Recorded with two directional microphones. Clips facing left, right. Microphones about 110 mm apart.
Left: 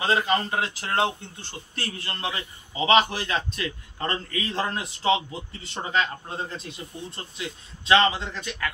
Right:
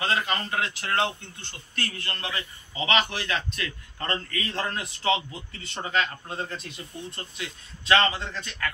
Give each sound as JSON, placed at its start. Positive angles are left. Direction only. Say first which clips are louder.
{"t": 0.0, "sound": "speech", "louder": "left 4 dB", "side_deg": 25}